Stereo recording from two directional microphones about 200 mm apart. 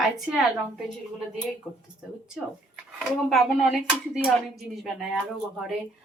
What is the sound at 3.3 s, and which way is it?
Dishes, centre (ahead or behind).